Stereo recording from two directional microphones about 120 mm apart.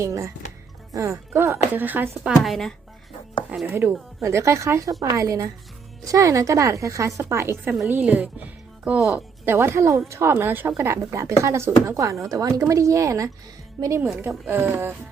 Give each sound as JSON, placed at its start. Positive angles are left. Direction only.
{"t": 0.0, "sound": "speech", "side_deg": -25}
{"t": 2.3, "sound": "speech", "side_deg": 0}
{"t": 3.5, "sound": "speech", "side_deg": -10}
{"t": 4.2, "sound": "speech", "side_deg": -25}
{"t": 9.5, "sound": "speech", "side_deg": -20}